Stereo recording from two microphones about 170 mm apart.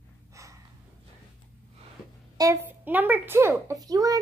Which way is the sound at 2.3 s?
15° right (ahead or behind).